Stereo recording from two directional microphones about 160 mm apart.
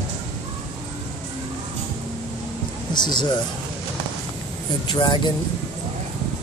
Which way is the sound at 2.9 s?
30° left (ahead or behind).